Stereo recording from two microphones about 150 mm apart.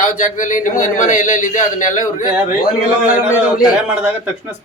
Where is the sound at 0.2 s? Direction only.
60° left (ahead or behind).